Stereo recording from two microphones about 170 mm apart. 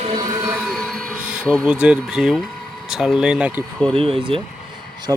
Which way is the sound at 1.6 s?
5° right (ahead or behind).